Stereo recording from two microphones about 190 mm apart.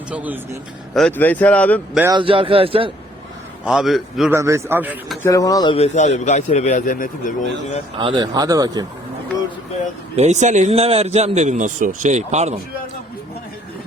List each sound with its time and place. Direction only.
0.1 s a man's voice: 10° right (ahead or behind)
0.9 s speech: 5° left (ahead or behind)
2.1 s speech: 25° right (ahead or behind)
3.7 s a man's voice: centre (ahead or behind)
4.3 s a man's voice: 15° right (ahead or behind)
5.2 s speech: 20° left (ahead or behind)
5.7 s a man's voice: 35° left (ahead or behind)
7.9 s speech: 25° right (ahead or behind)
10.2 s a man's voice: 40° right (ahead or behind)